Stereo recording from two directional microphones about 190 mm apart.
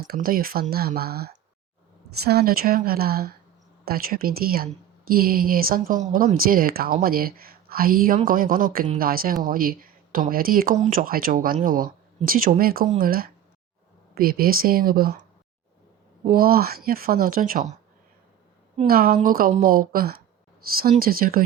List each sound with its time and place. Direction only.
0.1 s a woman's voice: 50° right (ahead or behind)
16.3 s a woman's voice: 50° right (ahead or behind)
18.9 s a woman's voice: 50° right (ahead or behind)